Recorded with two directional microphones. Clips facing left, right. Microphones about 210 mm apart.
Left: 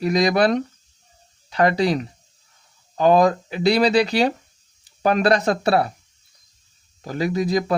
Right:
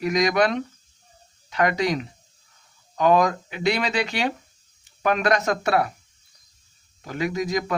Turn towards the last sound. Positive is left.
turn(degrees=35)  # may be behind; listen again after turning